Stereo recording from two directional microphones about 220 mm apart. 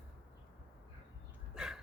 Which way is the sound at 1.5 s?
5° right (ahead or behind).